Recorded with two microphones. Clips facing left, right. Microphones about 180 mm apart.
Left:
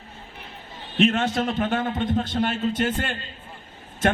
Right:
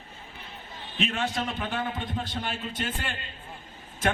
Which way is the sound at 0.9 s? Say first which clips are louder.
Left 9 dB; 50° left (ahead or behind).